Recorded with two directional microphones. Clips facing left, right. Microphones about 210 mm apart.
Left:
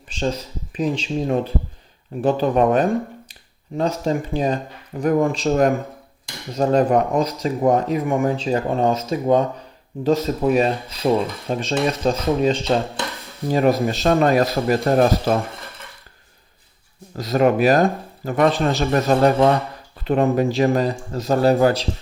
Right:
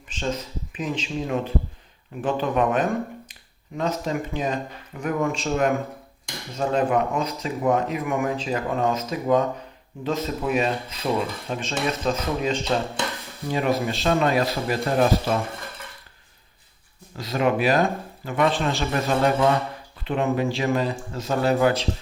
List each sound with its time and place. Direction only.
0.1 s speech: 35° left (ahead or behind)
12.7 s speech: 45° left (ahead or behind)
15.5 s a sound: centre (ahead or behind)
17.2 s speech: 40° left (ahead or behind)
19.3 s speech: 30° left (ahead or behind)